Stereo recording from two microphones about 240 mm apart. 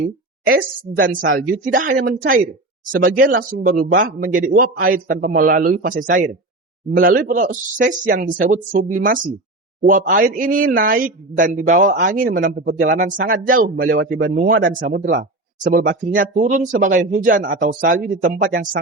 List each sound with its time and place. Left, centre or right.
0.0 s a woman's voice: right